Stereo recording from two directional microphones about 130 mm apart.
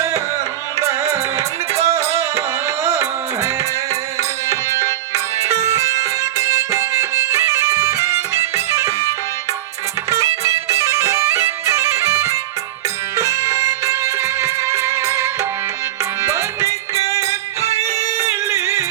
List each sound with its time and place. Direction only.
0.8 s music: 20° right (ahead or behind)
10.4 s bagpipes: 20° right (ahead or behind)
13.1 s music: 20° right (ahead or behind)
17.6 s music: 55° right (ahead or behind)
17.8 s music: 20° right (ahead or behind)